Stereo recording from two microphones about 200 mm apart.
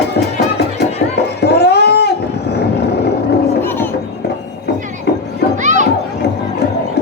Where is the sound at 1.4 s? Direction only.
55° left (ahead or behind).